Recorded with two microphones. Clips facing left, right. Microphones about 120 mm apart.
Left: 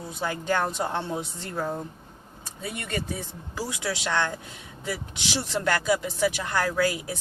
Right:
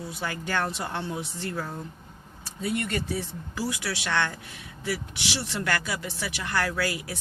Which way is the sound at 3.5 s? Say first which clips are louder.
Even; 20° left (ahead or behind).